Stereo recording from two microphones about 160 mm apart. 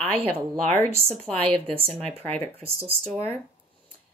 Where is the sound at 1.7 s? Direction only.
35° right (ahead or behind).